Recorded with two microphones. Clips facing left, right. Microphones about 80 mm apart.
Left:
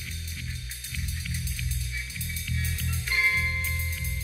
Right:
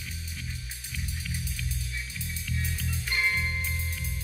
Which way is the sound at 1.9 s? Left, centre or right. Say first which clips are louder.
Even; centre.